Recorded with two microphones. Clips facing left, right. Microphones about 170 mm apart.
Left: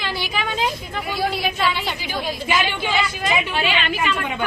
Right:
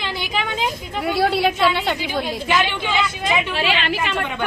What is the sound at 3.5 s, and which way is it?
Speech, 90° right.